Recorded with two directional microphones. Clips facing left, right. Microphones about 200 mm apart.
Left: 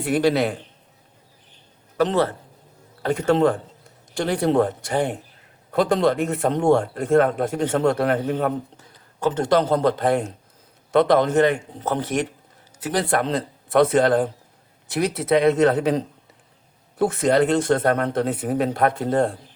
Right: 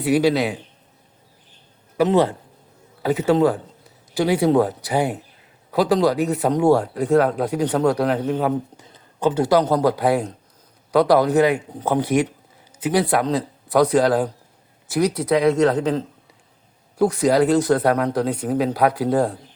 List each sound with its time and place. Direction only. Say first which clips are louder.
0.0 s speech: right 2 dB; 5° right (ahead or behind)
2.0 s speech: right 3 dB; 15° right (ahead or behind)
8.8 s a sound: even; 20° right (ahead or behind)
9.4 s a man's voice: right 1 dB; 5° right (ahead or behind)